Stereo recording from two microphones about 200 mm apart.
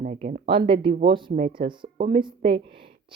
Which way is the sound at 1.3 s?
40° right (ahead or behind).